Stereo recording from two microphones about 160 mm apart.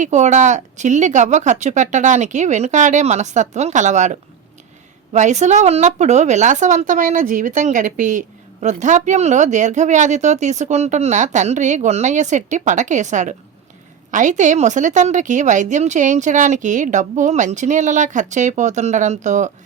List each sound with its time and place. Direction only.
0.0 s a woman's voice: 45° right (ahead or behind)